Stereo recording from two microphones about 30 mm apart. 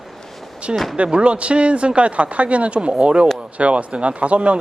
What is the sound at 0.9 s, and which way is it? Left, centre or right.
Speech, right.